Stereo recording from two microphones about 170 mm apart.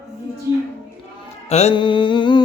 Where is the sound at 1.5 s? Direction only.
35° left (ahead or behind).